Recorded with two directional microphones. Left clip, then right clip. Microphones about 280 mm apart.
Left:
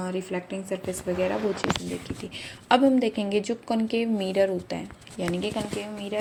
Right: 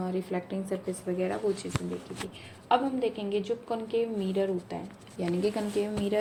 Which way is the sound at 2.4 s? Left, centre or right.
Left.